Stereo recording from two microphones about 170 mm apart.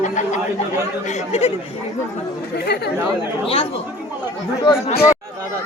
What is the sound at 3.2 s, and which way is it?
Speech, 35° left (ahead or behind).